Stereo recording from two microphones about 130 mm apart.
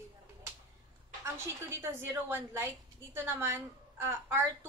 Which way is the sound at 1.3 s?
20° right (ahead or behind).